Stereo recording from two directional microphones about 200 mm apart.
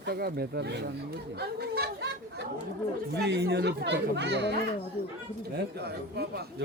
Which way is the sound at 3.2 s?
55° right (ahead or behind).